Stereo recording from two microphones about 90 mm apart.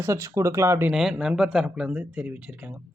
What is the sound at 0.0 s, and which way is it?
Speech, 30° right (ahead or behind).